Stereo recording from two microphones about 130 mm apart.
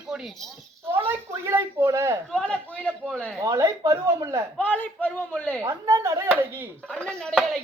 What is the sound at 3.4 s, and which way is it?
Speech, 25° right (ahead or behind).